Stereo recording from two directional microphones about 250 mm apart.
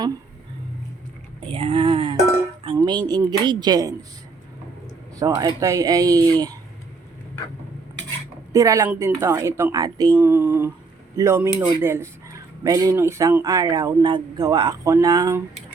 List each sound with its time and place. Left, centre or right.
1.5 s speech: right
2.6 s music: centre
3.1 s speech: centre
5.1 s speech: centre
8.5 s speech: centre